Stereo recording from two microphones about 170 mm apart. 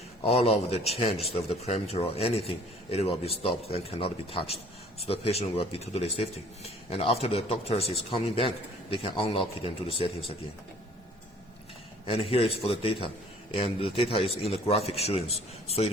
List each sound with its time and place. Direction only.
0.2 s a man's voice: 35° left (ahead or behind)
12.0 s a man's voice: 35° left (ahead or behind)